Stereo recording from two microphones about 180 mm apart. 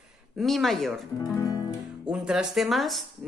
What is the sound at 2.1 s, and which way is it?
Speech, 5° right (ahead or behind).